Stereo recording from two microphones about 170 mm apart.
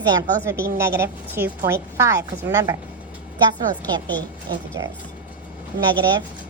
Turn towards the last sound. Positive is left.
turn(degrees=-25)  # may be behind; listen again after turning